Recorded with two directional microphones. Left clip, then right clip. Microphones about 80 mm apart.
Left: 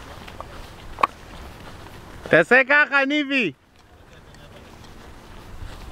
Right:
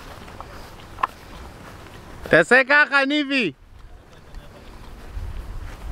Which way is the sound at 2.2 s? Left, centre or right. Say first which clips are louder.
Even; centre.